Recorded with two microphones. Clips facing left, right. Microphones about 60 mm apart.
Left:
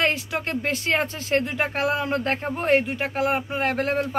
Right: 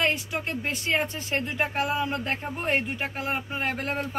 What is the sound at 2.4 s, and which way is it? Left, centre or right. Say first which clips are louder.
Speech: left 6 dB; left.